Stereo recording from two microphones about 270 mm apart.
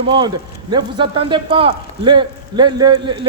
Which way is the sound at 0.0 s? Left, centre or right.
Centre.